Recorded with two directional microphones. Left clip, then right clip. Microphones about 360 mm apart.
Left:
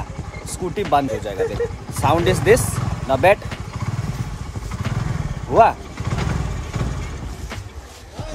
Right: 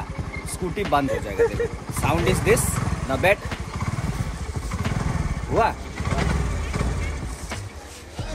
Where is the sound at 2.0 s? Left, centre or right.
Centre.